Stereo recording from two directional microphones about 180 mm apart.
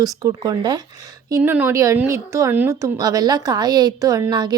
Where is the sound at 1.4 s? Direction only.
10° right (ahead or behind).